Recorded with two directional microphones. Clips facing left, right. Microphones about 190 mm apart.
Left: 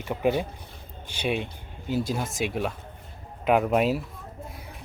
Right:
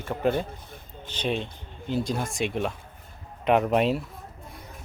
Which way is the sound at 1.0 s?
10° left (ahead or behind).